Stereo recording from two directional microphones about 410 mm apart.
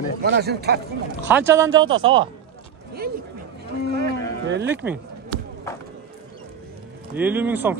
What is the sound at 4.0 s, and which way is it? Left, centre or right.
Speech, right.